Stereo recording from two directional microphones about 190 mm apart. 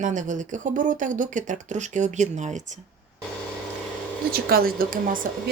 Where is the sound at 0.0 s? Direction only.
40° right (ahead or behind).